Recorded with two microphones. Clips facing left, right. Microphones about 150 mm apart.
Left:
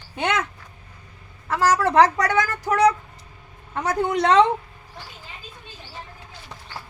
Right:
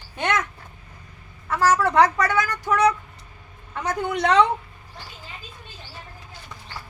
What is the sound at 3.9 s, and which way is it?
Speech, 35° left (ahead or behind).